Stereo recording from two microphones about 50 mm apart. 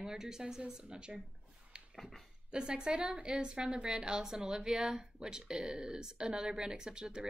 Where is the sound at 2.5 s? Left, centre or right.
Centre.